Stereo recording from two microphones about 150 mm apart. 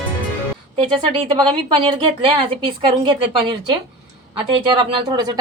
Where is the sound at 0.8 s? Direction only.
35° right (ahead or behind).